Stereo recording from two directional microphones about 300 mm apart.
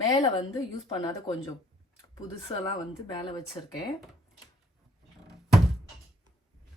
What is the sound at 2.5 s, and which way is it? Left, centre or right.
Speech, centre.